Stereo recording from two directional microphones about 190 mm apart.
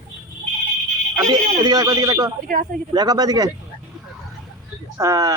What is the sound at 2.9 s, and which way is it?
Speech, 20° right (ahead or behind).